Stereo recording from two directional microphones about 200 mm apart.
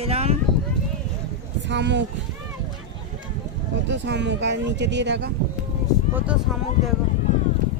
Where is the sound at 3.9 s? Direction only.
60° right (ahead or behind).